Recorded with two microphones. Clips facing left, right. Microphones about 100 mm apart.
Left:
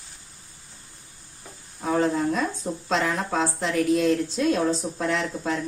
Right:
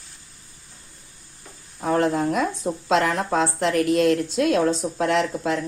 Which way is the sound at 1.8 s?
60° right (ahead or behind).